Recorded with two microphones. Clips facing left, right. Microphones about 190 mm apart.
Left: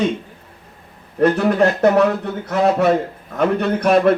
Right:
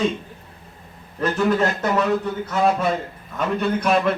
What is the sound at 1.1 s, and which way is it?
A man's voice, 60° left (ahead or behind).